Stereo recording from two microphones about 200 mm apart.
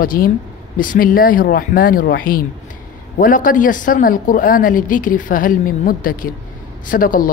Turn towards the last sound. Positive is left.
turn(degrees=45)  # may be behind; listen again after turning